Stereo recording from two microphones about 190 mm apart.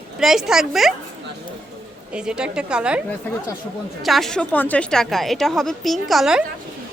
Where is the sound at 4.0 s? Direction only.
Centre (ahead or behind).